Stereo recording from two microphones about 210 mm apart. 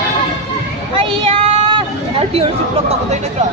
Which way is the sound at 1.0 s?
25° right (ahead or behind).